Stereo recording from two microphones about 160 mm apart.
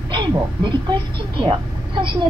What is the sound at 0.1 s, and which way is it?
Speech, 30° right (ahead or behind).